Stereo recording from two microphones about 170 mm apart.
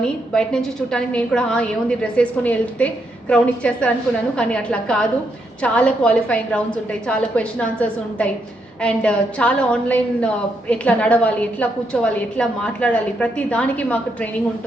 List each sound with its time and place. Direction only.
0.3 s a woman's voice: 5° left (ahead or behind)